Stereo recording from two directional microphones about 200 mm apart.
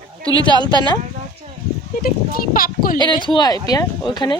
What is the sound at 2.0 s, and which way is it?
Speech, 45° left (ahead or behind).